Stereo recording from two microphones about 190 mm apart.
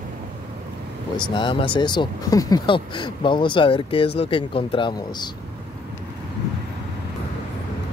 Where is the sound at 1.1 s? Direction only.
25° left (ahead or behind).